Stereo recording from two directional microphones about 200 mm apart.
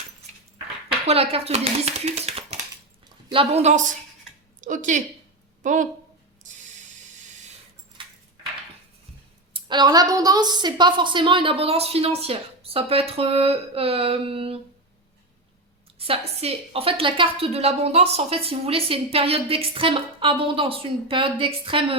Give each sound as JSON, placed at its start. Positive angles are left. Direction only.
{"t": 1.0, "sound": "speech", "side_deg": -30}
{"t": 6.4, "sound": "a sound", "side_deg": -40}
{"t": 8.0, "sound": "keys jangling", "side_deg": -25}
{"t": 9.5, "sound": "a woman's voice", "side_deg": -25}
{"t": 16.0, "sound": "a woman's voice", "side_deg": -30}